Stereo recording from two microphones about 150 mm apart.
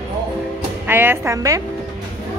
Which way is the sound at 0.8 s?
15° right (ahead or behind).